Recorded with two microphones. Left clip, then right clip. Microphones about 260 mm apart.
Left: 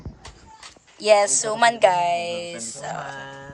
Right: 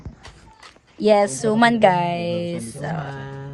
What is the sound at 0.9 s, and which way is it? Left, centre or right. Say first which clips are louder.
A woman's voice: even; centre.